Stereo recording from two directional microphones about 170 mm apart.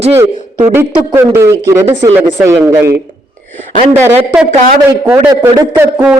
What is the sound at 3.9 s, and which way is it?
Speech, 10° right (ahead or behind).